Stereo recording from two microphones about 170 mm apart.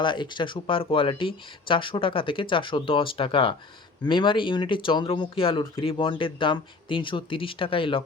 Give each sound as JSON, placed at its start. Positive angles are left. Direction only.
{"t": 0.0, "sound": "speech", "side_deg": 25}